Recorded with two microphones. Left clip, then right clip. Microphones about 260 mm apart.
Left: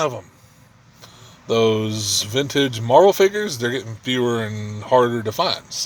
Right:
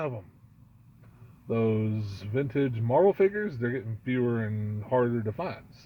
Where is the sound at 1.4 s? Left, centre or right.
Centre.